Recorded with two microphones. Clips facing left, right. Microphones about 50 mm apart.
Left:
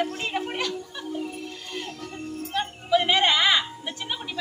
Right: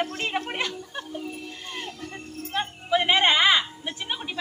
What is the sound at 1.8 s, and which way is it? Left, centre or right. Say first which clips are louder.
Music: left 2 dB; centre.